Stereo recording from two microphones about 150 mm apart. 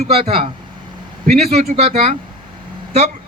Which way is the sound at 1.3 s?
45° right (ahead or behind).